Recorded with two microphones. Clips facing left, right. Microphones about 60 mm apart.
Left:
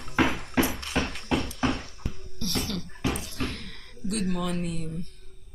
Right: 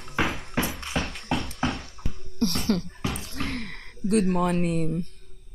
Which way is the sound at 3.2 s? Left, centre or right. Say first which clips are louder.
Right 2 dB; right.